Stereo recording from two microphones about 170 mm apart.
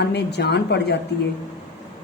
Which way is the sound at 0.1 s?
75° left (ahead or behind).